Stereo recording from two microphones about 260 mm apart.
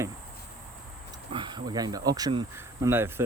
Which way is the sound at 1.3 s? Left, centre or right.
Centre.